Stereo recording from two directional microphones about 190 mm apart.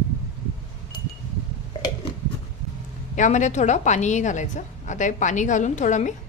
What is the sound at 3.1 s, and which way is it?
A woman's voice, 40° left (ahead or behind).